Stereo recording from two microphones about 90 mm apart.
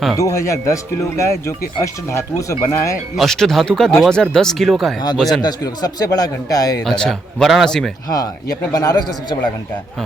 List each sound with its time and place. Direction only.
0.2 s speech: 35° left (ahead or behind)
3.2 s speech: 5° left (ahead or behind)
5.4 s speech: 50° left (ahead or behind)
6.8 s speech: 5° left (ahead or behind)
8.1 s speech: 45° left (ahead or behind)